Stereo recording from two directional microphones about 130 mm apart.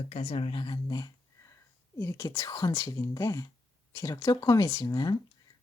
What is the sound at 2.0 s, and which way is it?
A woman's voice, 20° left (ahead or behind).